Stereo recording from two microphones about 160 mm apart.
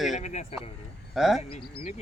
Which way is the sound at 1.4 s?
40° left (ahead or behind).